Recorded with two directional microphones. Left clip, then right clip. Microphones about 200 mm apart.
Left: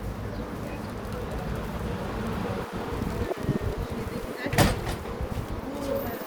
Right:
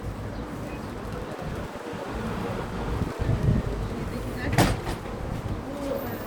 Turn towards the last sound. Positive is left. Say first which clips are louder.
# even
turn(degrees=50)  # may be behind; listen again after turning